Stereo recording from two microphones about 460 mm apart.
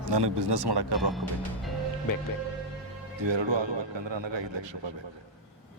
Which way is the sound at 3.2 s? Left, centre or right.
Right.